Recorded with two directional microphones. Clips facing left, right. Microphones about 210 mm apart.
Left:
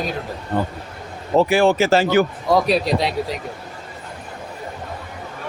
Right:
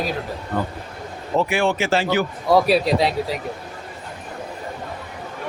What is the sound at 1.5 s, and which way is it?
Speech, 35° left (ahead or behind).